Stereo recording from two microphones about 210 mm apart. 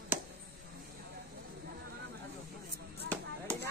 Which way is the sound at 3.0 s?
5° left (ahead or behind).